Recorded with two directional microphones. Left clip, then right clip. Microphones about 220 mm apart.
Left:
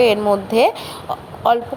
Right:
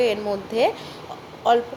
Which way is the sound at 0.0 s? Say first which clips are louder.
Left 8 dB; 20° left (ahead or behind).